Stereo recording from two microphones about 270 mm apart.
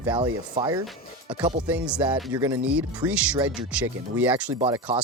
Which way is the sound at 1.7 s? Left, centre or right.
Centre.